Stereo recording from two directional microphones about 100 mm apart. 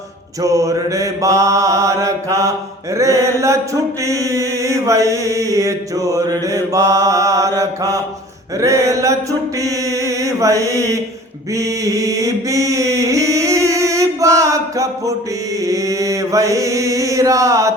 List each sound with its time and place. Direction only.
0.4 s mantra: 35° right (ahead or behind)